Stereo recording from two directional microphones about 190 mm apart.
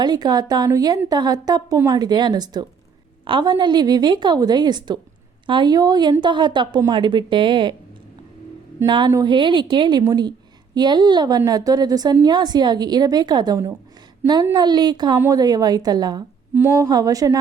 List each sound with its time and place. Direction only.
0.0 s a woman's voice: 20° right (ahead or behind)
8.8 s a woman's voice: 20° right (ahead or behind)